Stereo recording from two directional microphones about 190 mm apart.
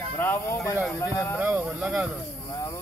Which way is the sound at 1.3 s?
10° right (ahead or behind).